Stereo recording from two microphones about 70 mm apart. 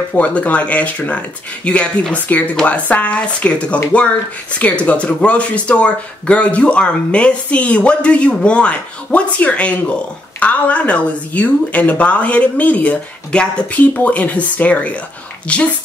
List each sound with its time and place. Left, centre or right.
0.1 s speech: centre